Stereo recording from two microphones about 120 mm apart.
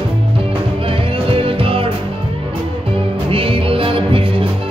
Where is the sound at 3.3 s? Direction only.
50° right (ahead or behind).